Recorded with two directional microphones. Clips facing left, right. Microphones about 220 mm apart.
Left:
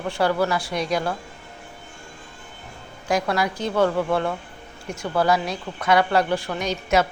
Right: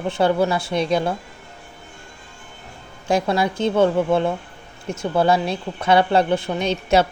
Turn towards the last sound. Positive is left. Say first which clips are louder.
# right 3 dB
turn(degrees=-30)  # may be behind; listen again after turning